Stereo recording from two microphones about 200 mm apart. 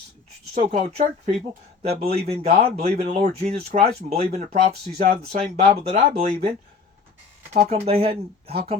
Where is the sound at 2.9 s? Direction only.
45° right (ahead or behind).